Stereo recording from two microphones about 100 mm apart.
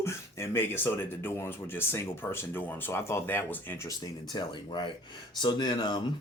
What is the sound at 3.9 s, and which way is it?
Speech, 50° left (ahead or behind).